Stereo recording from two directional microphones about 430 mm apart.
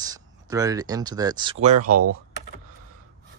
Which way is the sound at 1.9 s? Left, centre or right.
Right.